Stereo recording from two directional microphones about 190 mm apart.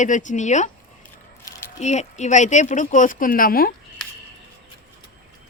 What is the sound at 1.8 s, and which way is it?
A woman's voice, 35° left (ahead or behind).